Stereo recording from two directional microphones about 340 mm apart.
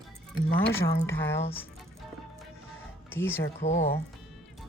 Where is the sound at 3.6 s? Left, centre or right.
Centre.